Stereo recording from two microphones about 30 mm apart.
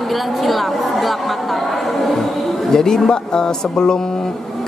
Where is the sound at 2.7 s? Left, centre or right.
Centre.